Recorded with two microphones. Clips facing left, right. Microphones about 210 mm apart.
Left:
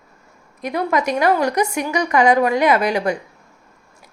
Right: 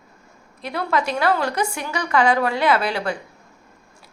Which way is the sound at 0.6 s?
15° left (ahead or behind).